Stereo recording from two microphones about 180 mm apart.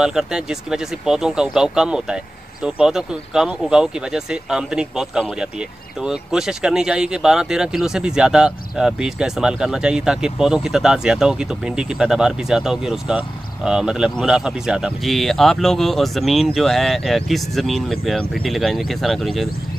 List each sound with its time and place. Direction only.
0.0 s speech: 5° right (ahead or behind)